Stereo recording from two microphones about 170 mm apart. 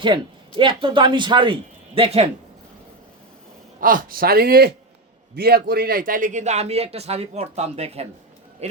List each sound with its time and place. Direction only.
0.0 s a man's voice: 30° right (ahead or behind)
3.8 s a man's voice: 55° right (ahead or behind); by 8.0 s 35° right (ahead or behind)